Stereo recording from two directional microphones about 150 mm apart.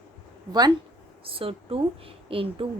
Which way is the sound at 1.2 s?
40° right (ahead or behind).